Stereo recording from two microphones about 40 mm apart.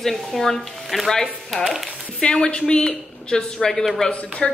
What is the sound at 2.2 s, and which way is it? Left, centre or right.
Speech, left.